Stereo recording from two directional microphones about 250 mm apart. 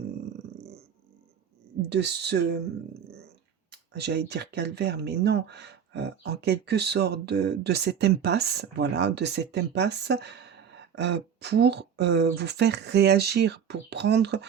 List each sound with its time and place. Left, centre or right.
1.9 s speech: right
3.7 s speech: right